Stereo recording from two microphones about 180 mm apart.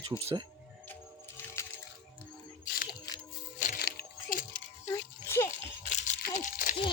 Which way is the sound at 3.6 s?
55° left (ahead or behind).